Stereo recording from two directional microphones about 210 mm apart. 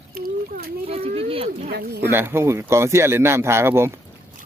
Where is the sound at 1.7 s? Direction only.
50° right (ahead or behind).